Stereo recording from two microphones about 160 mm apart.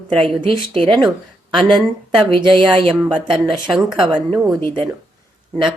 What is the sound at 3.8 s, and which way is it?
Speech, 25° right (ahead or behind).